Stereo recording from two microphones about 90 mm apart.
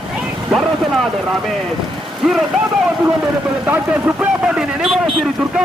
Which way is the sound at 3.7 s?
20° right (ahead or behind).